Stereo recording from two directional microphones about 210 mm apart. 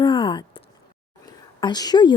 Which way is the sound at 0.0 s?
25° left (ahead or behind).